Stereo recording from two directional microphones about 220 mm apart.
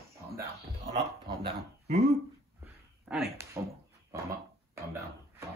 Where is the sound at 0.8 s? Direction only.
25° right (ahead or behind).